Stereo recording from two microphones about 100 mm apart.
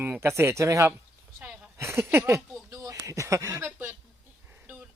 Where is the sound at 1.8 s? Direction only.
25° right (ahead or behind).